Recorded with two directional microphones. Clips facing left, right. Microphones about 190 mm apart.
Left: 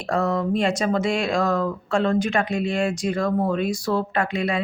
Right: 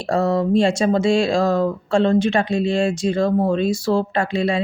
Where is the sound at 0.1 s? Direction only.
30° right (ahead or behind).